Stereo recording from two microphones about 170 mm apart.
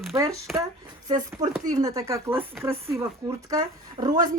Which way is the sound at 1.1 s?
20° right (ahead or behind).